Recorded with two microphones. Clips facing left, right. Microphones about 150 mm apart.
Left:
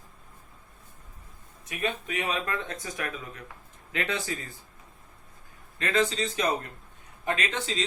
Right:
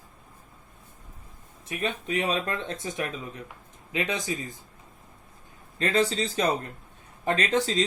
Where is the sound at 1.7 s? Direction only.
30° right (ahead or behind).